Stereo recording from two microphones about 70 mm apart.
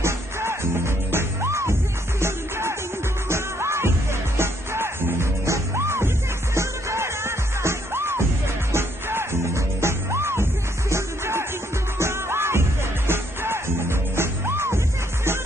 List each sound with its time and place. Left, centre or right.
0.0 s music: right